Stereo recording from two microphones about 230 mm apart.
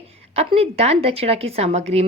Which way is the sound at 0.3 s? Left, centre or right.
Right.